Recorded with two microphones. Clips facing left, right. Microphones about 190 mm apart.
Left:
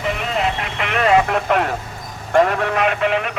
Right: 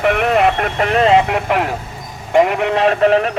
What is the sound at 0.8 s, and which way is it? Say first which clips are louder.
Speech: right 3 dB; 35° right (ahead or behind).